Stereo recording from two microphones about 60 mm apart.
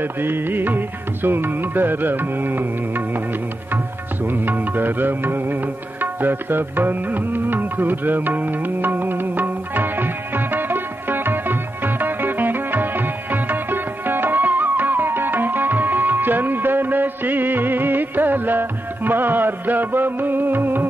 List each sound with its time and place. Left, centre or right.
0.0 s music: right
4.3 s music: right